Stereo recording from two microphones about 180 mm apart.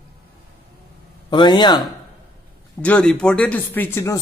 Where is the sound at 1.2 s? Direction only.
25° left (ahead or behind).